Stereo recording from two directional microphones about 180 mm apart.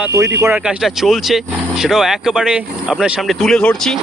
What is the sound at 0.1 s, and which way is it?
Speech, 15° right (ahead or behind).